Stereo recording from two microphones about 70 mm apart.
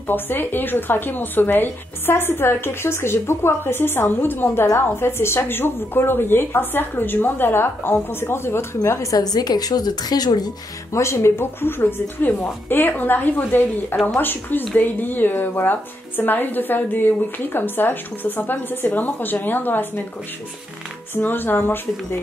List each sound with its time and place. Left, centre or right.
0.0 s a woman's voice: left
10.9 s speech: left
21.1 s speech: left